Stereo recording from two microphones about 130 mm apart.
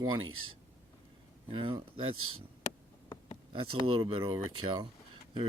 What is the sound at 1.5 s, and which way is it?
Speech, 40° right (ahead or behind).